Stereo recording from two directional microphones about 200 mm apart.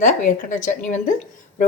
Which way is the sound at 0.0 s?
40° left (ahead or behind).